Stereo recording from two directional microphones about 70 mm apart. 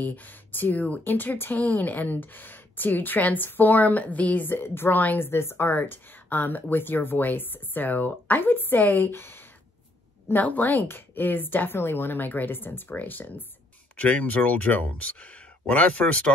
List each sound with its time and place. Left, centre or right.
0.0 s speech: left